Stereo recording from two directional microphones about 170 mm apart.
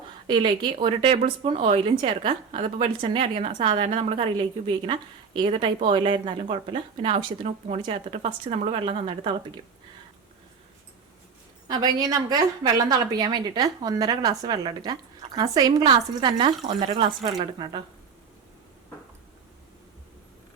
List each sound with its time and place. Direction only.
0.3 s a woman's voice: 30° right (ahead or behind)
11.7 s a woman's voice: 20° right (ahead or behind)